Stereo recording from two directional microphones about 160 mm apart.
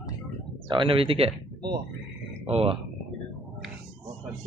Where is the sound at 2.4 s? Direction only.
40° right (ahead or behind).